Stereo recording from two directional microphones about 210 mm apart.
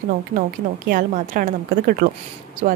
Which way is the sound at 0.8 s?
40° right (ahead or behind).